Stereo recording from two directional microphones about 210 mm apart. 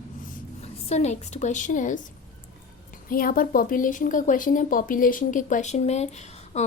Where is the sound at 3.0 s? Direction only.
40° left (ahead or behind).